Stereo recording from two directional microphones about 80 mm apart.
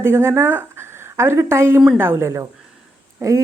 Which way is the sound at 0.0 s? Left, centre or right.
Right.